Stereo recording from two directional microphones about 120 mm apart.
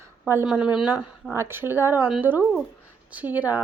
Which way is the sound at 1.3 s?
20° right (ahead or behind).